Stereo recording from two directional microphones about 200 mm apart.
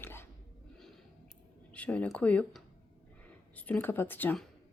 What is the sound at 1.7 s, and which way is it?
Speech, 5° left (ahead or behind).